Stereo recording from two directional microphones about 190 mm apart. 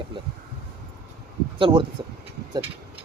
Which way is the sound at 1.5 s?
25° right (ahead or behind).